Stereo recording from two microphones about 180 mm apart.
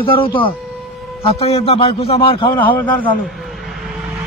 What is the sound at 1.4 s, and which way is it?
Speech, 35° left (ahead or behind).